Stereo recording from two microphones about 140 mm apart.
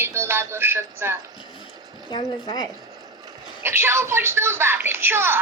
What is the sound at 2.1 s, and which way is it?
Speech, 35° left (ahead or behind).